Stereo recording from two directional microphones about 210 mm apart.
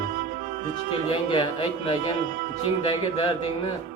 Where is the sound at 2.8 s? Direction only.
25° left (ahead or behind).